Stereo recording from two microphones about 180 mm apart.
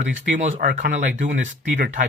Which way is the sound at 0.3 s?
45° right (ahead or behind).